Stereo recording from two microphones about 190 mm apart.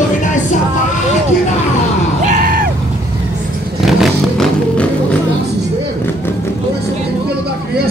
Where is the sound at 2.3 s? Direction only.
45° right (ahead or behind).